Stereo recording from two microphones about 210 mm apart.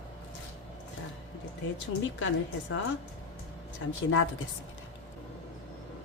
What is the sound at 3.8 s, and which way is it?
Speech, 75° left (ahead or behind).